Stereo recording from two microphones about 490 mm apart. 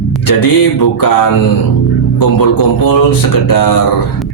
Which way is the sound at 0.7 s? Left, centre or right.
Left.